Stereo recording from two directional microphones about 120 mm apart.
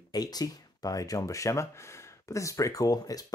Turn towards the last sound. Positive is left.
turn(degrees=30)  # may be behind; listen again after turning